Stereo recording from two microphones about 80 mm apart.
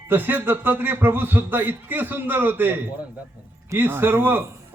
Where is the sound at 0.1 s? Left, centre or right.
Right.